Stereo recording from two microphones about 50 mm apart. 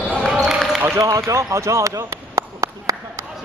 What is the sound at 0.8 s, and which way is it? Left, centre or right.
Speech, right.